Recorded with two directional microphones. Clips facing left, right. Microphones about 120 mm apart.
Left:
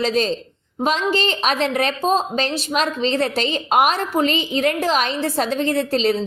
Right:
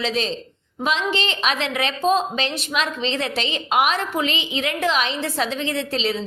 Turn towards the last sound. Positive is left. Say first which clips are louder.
# left 5 dB
turn(degrees=45)  # may be behind; listen again after turning